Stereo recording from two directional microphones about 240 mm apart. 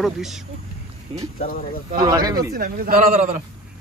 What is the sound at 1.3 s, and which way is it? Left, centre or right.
Speech, left.